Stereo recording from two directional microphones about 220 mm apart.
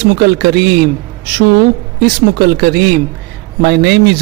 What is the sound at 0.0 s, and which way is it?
Speech, 45° right (ahead or behind).